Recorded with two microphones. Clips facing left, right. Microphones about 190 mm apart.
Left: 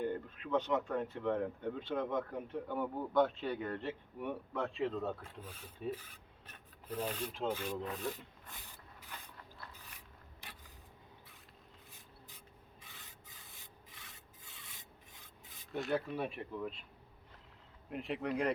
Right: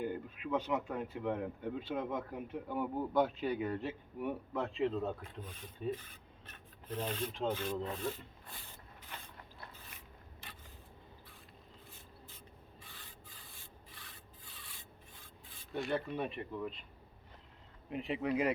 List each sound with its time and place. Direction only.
0.0 s speech: 10° right (ahead or behind); by 6.1 s 10° left (ahead or behind)
6.8 s rub: 10° left (ahead or behind)
15.7 s speech: centre (ahead or behind)
17.8 s speech: centre (ahead or behind)